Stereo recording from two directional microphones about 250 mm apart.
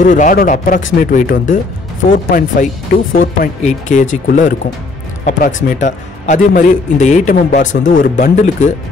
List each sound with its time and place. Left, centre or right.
0.0 s a man's voice: left